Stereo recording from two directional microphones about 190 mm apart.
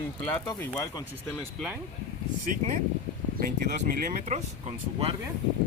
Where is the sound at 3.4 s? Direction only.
50° right (ahead or behind).